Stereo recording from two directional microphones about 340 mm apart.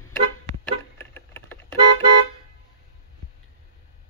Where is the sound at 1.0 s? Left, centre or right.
Centre.